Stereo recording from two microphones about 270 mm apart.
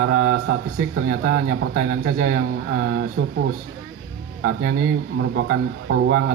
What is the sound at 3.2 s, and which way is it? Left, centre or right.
Speech, right.